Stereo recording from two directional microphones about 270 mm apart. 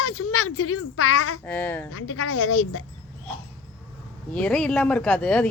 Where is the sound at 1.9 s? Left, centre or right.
Left.